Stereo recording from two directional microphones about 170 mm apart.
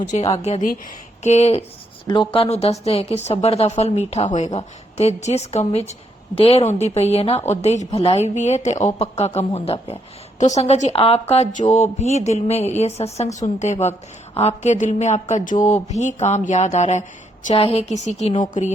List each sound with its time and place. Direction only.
0.1 s a woman's voice: 40° left (ahead or behind)
2.0 s a woman's voice: 30° left (ahead or behind)
14.3 s mantra: 40° left (ahead or behind)
17.5 s a woman's voice: 35° left (ahead or behind)